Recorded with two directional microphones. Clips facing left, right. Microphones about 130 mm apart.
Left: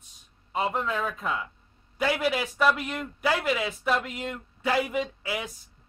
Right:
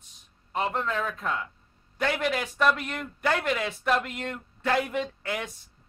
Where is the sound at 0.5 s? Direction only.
5° left (ahead or behind).